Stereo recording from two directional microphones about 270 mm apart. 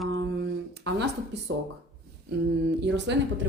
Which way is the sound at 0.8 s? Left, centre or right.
Right.